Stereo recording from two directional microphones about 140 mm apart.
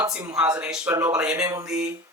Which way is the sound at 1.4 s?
20° right (ahead or behind).